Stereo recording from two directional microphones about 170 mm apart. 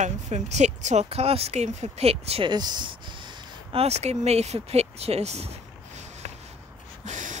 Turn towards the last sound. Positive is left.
turn(degrees=-45)  # may be behind; listen again after turning